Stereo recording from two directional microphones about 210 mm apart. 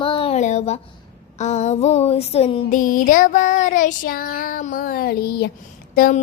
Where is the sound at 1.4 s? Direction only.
35° left (ahead or behind).